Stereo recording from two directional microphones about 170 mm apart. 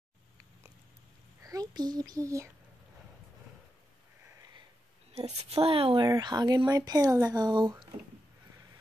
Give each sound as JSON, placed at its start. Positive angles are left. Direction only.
{"t": 1.4, "sound": "a child's voice", "side_deg": -20}
{"t": 5.1, "sound": "a woman's voice", "side_deg": -35}
{"t": 6.0, "sound": "speech", "side_deg": -20}